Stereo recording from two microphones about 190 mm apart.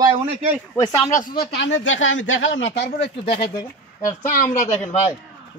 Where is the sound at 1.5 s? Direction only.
75° left (ahead or behind).